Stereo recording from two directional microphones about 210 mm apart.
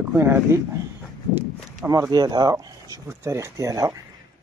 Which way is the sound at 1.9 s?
15° right (ahead or behind).